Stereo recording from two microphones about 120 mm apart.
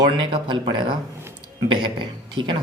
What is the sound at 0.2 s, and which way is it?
Speech, 45° right (ahead or behind).